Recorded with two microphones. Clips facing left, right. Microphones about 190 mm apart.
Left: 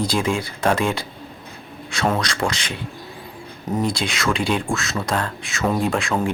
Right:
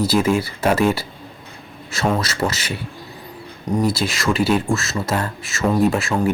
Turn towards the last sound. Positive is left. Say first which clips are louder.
# right 3 dB
turn(degrees=-5)  # may be behind; listen again after turning